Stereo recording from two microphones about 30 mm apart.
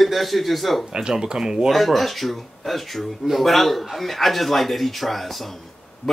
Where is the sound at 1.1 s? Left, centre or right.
Centre.